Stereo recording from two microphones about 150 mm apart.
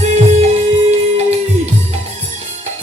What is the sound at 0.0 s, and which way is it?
Music, 50° right (ahead or behind).